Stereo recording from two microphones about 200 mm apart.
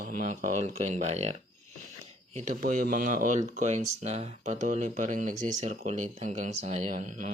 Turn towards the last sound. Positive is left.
turn(degrees=-40)  # may be behind; listen again after turning